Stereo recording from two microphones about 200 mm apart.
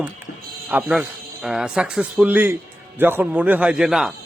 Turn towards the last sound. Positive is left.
turn(degrees=0)  # may be behind; listen again after turning